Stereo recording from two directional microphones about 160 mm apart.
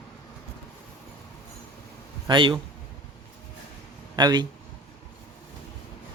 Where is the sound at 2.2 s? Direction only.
30° right (ahead or behind).